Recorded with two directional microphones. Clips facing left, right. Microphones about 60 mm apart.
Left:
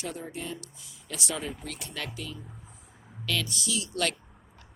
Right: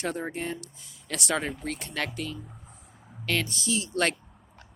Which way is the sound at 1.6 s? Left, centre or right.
Right.